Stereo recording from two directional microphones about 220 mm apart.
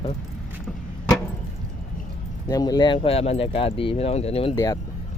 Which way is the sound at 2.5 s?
15° left (ahead or behind).